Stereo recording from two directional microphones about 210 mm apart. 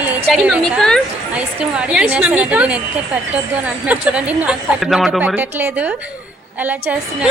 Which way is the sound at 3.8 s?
5° right (ahead or behind).